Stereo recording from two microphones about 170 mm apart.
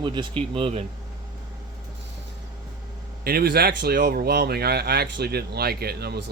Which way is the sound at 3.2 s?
65° right (ahead or behind).